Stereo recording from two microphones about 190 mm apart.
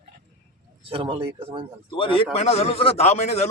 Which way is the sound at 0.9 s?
30° right (ahead or behind).